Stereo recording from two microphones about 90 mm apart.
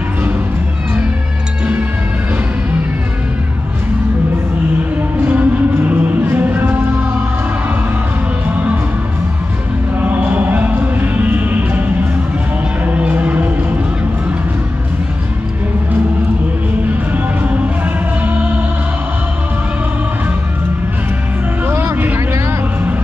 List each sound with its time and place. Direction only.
5.2 s music: 20° right (ahead or behind)
9.9 s music: 20° right (ahead or behind)
12.8 s music: 15° right (ahead or behind)
17.1 s music: 20° right (ahead or behind)
21.6 s a sound: 25° right (ahead or behind)